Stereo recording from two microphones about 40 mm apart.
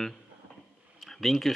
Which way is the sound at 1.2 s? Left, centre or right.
Centre.